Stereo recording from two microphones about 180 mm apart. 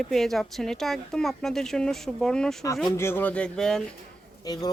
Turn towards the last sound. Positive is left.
turn(degrees=20)  # may be behind; listen again after turning